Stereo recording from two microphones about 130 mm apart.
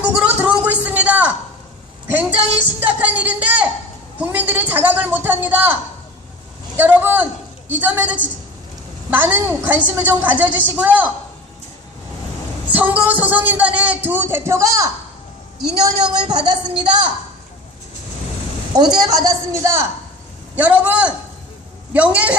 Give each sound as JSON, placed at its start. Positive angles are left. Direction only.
{"t": 0.0, "sound": "a sound", "side_deg": -10}
{"t": 2.8, "sound": "a man's voice", "side_deg": -10}
{"t": 6.7, "sound": "a man's voice", "side_deg": -15}
{"t": 12.7, "sound": "a man's voice", "side_deg": -10}
{"t": 16.3, "sound": "a woman's voice", "side_deg": -35}
{"t": 18.7, "sound": "a woman's voice", "side_deg": -30}
{"t": 20.6, "sound": "a man's voice", "side_deg": -10}